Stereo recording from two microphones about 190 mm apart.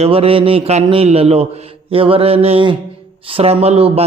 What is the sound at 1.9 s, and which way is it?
Mantra, 30° right (ahead or behind).